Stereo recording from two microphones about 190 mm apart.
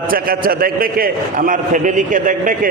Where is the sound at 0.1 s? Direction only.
50° right (ahead or behind).